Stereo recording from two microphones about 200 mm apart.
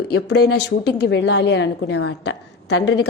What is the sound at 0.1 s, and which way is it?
A woman's voice, 55° left (ahead or behind).